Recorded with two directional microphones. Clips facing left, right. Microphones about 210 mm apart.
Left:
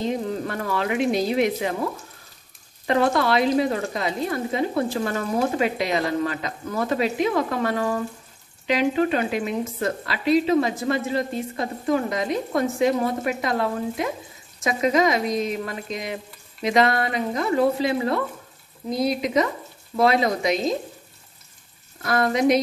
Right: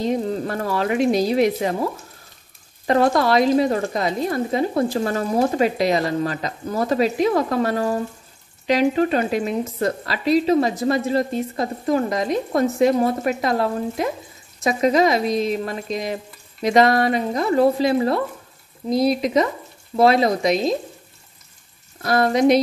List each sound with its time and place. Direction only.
0.5 s speech: 40° right (ahead or behind)
2.9 s speech: 40° right (ahead or behind)
22.0 s speech: 35° right (ahead or behind)